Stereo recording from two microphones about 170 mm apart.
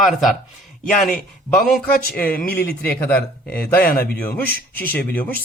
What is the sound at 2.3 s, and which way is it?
Speech, 65° left (ahead or behind).